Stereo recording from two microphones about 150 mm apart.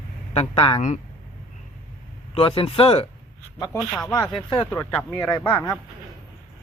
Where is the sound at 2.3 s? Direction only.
40° left (ahead or behind).